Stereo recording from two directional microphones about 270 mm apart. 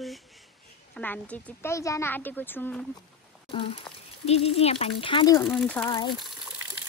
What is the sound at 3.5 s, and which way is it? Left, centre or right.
Speech, centre.